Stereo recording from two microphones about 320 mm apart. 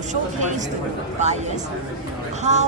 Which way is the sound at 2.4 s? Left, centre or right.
Right.